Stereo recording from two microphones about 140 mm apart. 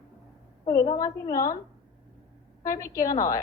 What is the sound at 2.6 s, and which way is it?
Speech, 25° left (ahead or behind).